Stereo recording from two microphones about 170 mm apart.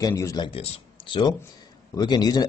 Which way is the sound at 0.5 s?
35° left (ahead or behind).